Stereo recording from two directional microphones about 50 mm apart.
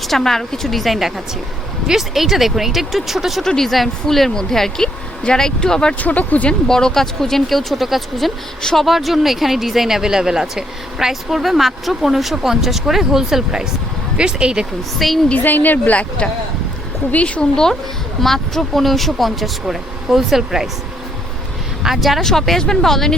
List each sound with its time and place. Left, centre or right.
0.1 s speech: centre
3.4 s speech: centre
5.9 s speech: left
6.5 s speech: centre
14.9 s speech: centre
15.4 s speech: left
15.8 s speech: left
18.2 s speech: centre
21.8 s speech: centre